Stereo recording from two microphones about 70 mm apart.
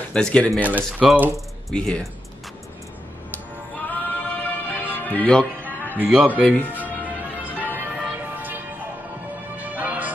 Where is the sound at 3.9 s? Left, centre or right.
Left.